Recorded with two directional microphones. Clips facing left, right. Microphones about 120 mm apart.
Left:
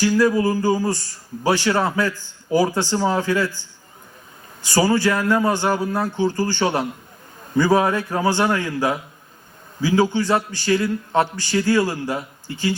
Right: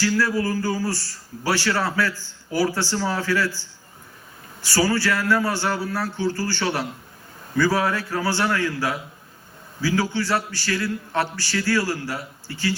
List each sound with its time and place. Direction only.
0.0 s a man's voice: 20° left (ahead or behind)